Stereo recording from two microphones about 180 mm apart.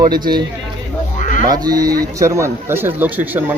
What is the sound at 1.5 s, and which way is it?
Speech, 20° right (ahead or behind).